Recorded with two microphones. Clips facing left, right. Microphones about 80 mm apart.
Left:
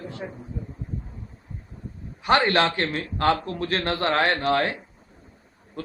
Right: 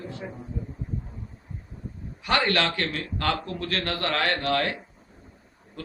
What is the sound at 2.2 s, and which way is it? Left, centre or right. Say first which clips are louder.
A man's voice: left 4 dB; left.